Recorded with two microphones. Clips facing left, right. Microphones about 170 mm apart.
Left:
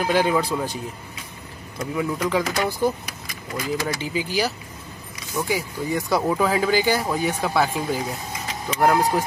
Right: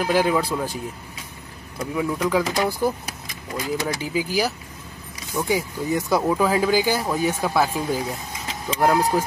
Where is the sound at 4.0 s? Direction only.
5° right (ahead or behind).